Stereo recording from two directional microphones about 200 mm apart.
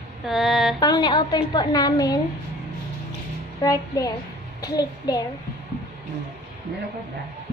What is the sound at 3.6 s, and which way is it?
A woman's voice, 20° left (ahead or behind).